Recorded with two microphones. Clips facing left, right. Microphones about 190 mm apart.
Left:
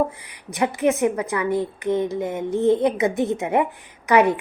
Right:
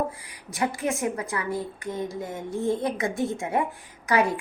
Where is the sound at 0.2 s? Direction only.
20° left (ahead or behind).